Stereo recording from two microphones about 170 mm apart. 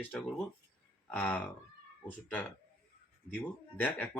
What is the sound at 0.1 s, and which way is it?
Speech, 5° left (ahead or behind).